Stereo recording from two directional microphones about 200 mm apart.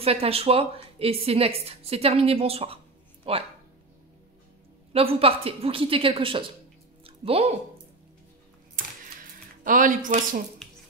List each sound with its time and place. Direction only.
0.0 s a woman's voice: 30° right (ahead or behind)
4.9 s a woman's voice: 30° right (ahead or behind)
9.6 s speech: 40° right (ahead or behind)